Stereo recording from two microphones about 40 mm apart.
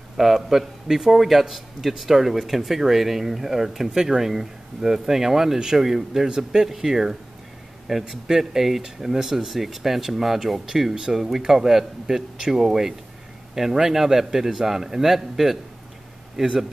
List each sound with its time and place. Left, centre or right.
0.2 s a man's voice: centre
6.6 s a man's voice: centre